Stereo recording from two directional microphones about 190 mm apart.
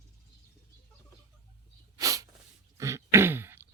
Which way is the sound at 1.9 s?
20° right (ahead or behind).